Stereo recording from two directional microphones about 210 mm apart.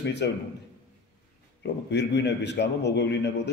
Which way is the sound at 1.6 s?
55° left (ahead or behind).